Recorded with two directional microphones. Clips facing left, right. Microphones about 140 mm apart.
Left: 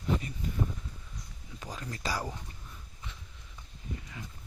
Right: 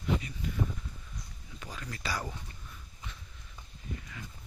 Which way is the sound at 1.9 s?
30° left (ahead or behind).